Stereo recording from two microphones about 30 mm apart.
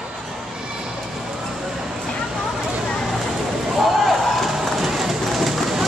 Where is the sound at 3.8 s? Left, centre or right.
Centre.